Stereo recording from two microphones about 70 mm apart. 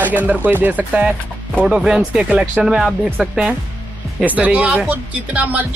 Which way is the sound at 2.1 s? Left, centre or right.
Centre.